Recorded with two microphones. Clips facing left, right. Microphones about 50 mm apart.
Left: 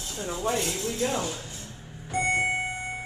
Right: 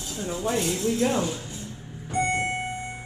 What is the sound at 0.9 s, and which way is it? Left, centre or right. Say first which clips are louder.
Speech: right 4 dB; centre.